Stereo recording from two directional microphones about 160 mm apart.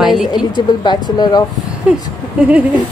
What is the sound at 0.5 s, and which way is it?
Speech, 30° left (ahead or behind).